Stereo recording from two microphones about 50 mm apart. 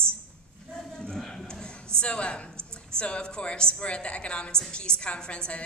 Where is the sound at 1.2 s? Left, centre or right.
Centre.